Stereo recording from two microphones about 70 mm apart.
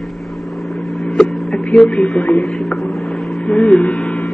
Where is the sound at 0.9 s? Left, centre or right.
Centre.